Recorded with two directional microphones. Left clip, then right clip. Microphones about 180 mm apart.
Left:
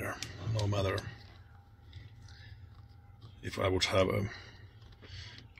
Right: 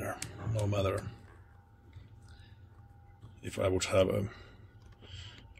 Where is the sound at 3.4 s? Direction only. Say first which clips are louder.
Even; 5° right (ahead or behind).